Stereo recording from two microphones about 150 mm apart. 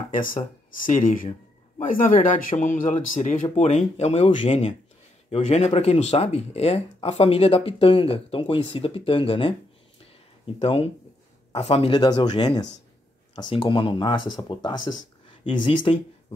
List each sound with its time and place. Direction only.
0.1 s speech: 65° left (ahead or behind); by 16.3 s 35° left (ahead or behind)